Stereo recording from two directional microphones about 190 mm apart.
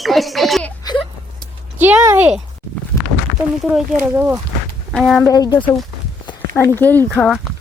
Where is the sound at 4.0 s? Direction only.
10° right (ahead or behind).